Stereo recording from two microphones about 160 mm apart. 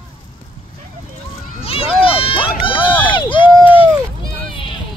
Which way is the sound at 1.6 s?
35° left (ahead or behind).